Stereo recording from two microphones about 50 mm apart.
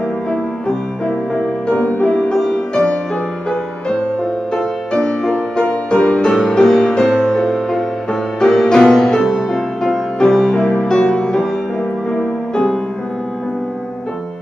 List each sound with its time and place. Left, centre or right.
0.3 s music: centre
1.8 s music: left
2.3 s music: centre
3.9 s music: centre
9.3 s music: centre
11.0 s music: centre